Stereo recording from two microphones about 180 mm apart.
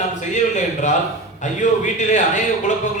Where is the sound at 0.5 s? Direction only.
45° left (ahead or behind).